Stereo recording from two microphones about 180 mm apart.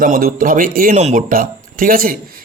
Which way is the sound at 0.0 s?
50° right (ahead or behind).